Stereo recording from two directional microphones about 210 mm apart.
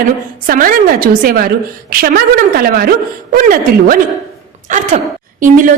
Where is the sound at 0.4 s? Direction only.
40° right (ahead or behind).